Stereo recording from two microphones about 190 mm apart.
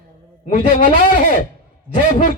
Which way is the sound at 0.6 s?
30° left (ahead or behind).